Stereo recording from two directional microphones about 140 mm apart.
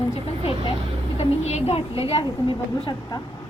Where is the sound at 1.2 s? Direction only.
50° left (ahead or behind).